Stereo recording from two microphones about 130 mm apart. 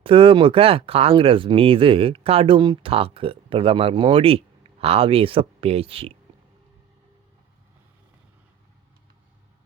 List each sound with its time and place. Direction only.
0.0 s speech: 45° right (ahead or behind)